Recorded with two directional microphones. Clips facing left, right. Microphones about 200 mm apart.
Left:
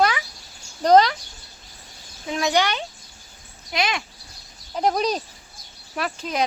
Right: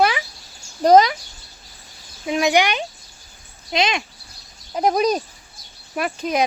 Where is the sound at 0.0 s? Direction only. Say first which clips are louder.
Right 2 dB; 20° right (ahead or behind).